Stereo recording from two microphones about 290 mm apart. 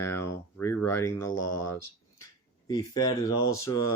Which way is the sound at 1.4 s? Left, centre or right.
Left.